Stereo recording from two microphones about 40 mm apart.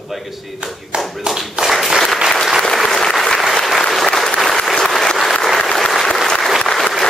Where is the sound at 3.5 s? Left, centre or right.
Centre.